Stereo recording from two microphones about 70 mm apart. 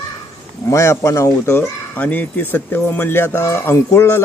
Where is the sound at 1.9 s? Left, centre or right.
Left.